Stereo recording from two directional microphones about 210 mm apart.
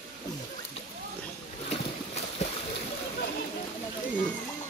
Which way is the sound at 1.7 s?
30° left (ahead or behind).